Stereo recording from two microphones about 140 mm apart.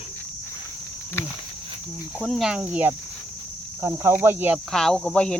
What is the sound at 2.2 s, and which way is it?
Speech, 5° left (ahead or behind).